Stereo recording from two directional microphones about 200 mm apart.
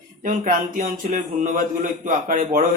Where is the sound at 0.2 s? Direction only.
40° right (ahead or behind).